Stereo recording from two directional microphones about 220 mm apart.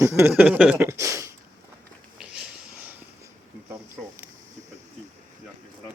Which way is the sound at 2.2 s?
5° right (ahead or behind).